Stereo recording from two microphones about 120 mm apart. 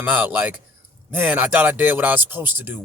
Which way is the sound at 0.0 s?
15° right (ahead or behind).